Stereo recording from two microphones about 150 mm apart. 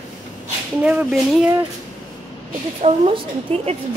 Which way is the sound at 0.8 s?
10° right (ahead or behind).